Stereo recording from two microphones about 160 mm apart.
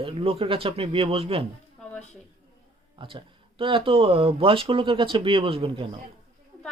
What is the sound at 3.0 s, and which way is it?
Speech, 30° right (ahead or behind).